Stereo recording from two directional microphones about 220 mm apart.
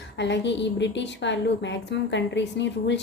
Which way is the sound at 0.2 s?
50° left (ahead or behind).